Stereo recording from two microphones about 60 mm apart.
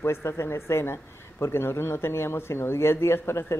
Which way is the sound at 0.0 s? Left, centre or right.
Left.